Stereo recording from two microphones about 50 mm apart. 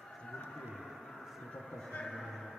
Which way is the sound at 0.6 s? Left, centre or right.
Centre.